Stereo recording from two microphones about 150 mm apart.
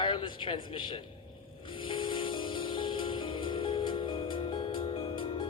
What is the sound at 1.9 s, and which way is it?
Music, 35° left (ahead or behind).